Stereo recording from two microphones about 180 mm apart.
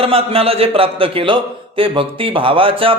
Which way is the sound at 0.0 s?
30° right (ahead or behind).